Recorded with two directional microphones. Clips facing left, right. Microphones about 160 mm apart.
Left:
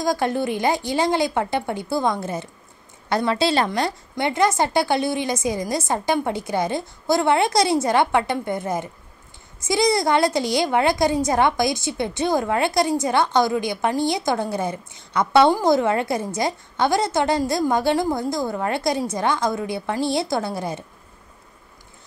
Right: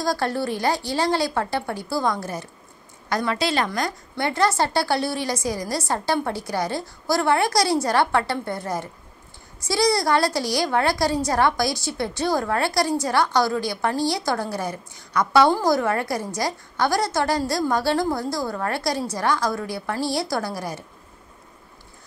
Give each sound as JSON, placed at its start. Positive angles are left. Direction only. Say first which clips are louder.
{"t": 0.0, "sound": "a woman's voice", "louder": "left 2 dB", "side_deg": 20}